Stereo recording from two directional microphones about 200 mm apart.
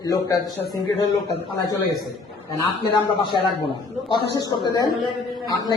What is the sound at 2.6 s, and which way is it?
A man's voice, 20° left (ahead or behind).